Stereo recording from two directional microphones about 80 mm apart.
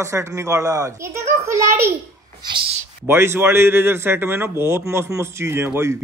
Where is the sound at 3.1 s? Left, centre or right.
Right.